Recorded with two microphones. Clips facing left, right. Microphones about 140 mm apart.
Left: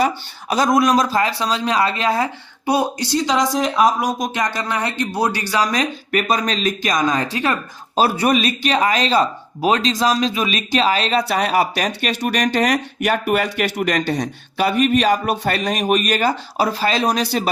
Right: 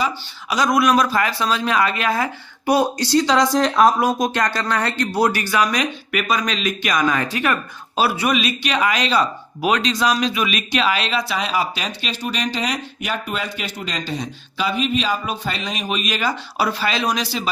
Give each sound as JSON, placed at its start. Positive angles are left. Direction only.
{"t": 0.9, "sound": "speech", "side_deg": 30}
{"t": 3.2, "sound": "speech", "side_deg": 0}
{"t": 4.4, "sound": "speech", "side_deg": 20}
{"t": 7.9, "sound": "speech", "side_deg": 40}
{"t": 11.2, "sound": "speech", "side_deg": 55}